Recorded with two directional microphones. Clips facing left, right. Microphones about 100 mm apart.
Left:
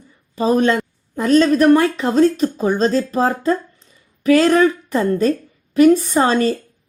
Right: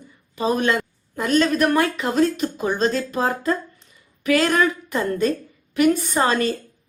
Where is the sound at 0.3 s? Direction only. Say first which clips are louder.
Left 5 dB; 35° left (ahead or behind).